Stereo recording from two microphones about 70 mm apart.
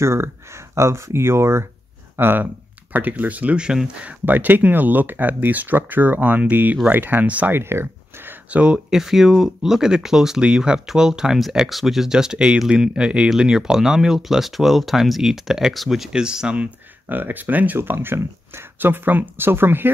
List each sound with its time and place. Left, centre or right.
0.0 s speech: right; by 4.1 s centre
4.3 s speech: right
7.5 s a sound: right
8.5 s speech: centre
17.1 s speech: right